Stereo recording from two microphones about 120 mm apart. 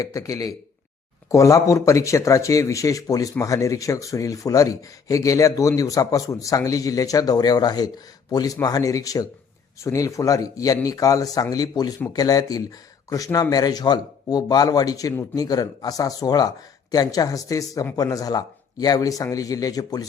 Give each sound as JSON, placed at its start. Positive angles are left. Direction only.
{"t": 0.0, "sound": "speech", "side_deg": 30}